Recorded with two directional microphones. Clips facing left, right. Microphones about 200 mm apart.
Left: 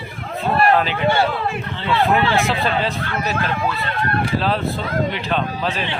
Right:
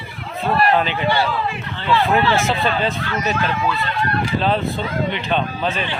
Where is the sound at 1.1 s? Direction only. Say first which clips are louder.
Left 2 dB; 50° left (ahead or behind).